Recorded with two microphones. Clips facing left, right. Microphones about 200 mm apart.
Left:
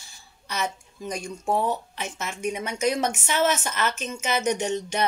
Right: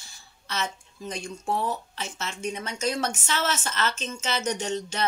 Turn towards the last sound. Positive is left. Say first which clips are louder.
# left 3 dB
turn(degrees=15)  # may be behind; listen again after turning